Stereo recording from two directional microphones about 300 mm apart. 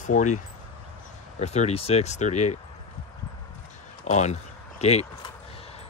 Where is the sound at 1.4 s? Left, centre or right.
Left.